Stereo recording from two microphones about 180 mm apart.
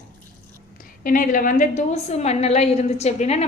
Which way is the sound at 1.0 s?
50° left (ahead or behind).